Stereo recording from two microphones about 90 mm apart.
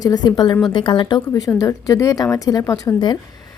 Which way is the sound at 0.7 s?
65° left (ahead or behind).